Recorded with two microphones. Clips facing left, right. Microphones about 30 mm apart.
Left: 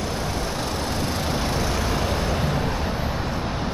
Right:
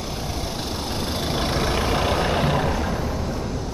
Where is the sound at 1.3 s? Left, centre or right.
Right.